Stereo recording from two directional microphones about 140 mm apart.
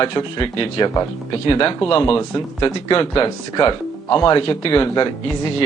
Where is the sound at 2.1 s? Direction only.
25° left (ahead or behind).